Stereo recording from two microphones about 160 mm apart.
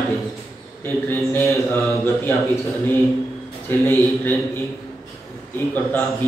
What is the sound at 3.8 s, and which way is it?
Speech, 15° left (ahead or behind).